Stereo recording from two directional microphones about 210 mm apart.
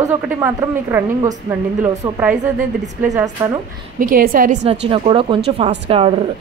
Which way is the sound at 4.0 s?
40° right (ahead or behind).